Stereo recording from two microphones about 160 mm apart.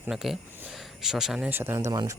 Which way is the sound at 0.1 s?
Centre (ahead or behind).